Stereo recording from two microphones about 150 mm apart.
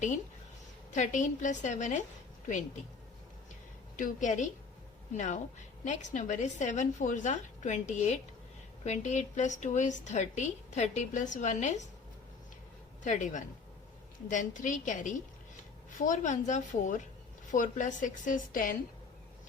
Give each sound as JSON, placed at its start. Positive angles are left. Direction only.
{"t": 0.9, "sound": "a woman's voice", "side_deg": 55}
{"t": 3.9, "sound": "a woman's voice", "side_deg": 60}
{"t": 13.0, "sound": "a woman's voice", "side_deg": 55}